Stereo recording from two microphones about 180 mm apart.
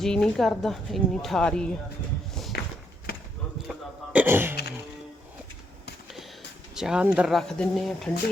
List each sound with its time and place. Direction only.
0.0 s speech: centre (ahead or behind)
2.5 s a sound: 60° left (ahead or behind)
3.7 s throat clearing: 10° right (ahead or behind)
6.7 s speech: 5° right (ahead or behind)